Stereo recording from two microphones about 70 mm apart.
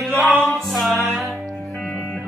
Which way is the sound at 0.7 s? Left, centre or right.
Centre.